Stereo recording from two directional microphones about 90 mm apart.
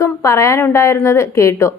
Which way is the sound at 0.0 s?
35° left (ahead or behind).